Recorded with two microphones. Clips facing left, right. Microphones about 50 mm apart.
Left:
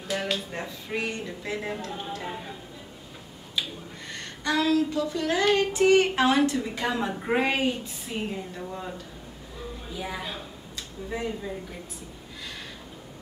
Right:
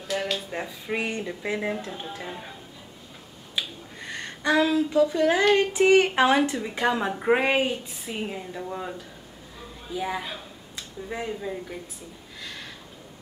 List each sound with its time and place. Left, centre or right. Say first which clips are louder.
0.1 s speech: right 1 dB; centre; by 1.7 s right
3.6 s finger snapping: even; centre
4.1 s a woman's voice: right 4 dB; centre
9.9 s speech: right 5 dB; centre